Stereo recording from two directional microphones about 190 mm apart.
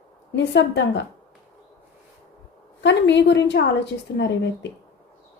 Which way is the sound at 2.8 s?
65° left (ahead or behind).